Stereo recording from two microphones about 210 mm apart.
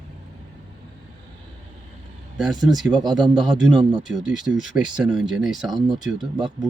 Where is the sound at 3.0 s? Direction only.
20° right (ahead or behind).